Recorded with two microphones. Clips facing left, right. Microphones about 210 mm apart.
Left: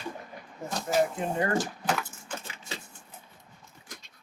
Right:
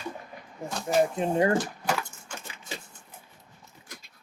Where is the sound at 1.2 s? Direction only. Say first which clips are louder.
Right 5 dB; 20° right (ahead or behind).